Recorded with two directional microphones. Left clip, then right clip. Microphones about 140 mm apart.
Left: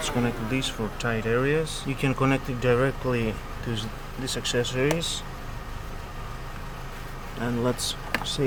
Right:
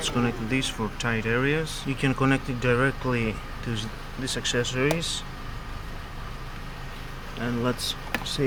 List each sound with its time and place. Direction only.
0.0 s speech: 10° left (ahead or behind)
7.4 s speech: 15° left (ahead or behind)